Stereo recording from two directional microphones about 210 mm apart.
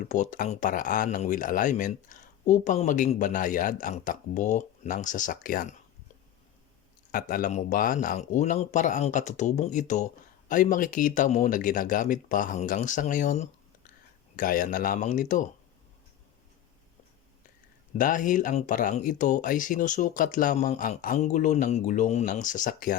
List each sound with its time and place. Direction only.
0.0 s speech: 35° left (ahead or behind)
7.1 s speech: 40° left (ahead or behind)
17.9 s speech: 40° left (ahead or behind)